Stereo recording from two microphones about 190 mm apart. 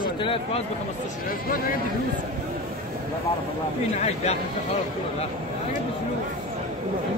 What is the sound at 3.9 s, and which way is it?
Speech, 35° left (ahead or behind).